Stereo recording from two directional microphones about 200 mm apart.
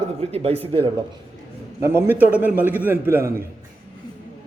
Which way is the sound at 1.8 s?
10° right (ahead or behind).